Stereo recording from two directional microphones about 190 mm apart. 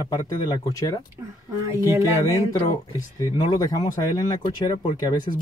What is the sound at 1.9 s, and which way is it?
Speech, 15° right (ahead or behind).